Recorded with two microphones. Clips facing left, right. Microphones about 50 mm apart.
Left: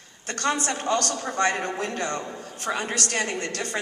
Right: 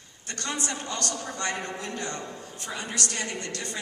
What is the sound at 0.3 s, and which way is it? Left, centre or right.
A man's voice, left.